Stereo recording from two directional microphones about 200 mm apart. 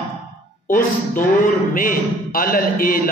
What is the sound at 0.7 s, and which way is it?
Speech, 45° left (ahead or behind).